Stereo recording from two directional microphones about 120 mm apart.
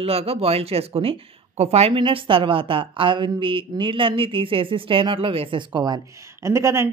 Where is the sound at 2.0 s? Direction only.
45° right (ahead or behind).